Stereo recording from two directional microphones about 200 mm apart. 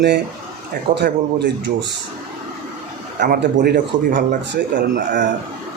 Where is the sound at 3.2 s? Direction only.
45° right (ahead or behind).